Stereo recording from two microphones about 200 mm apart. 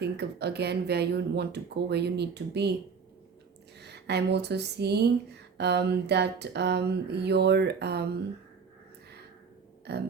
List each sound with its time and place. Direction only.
0.0 s speech: 55° right (ahead or behind)
3.8 s speech: 55° right (ahead or behind)
9.9 s speech: 55° right (ahead or behind)